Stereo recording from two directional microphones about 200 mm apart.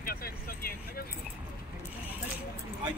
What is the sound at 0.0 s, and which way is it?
Speech, 50° left (ahead or behind).